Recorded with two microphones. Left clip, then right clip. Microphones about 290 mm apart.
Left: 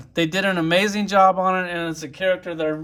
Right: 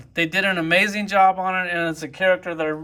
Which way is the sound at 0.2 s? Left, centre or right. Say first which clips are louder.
Even; centre.